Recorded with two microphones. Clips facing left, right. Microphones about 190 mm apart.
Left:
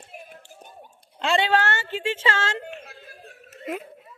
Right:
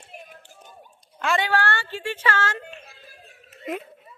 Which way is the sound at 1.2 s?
20° left (ahead or behind).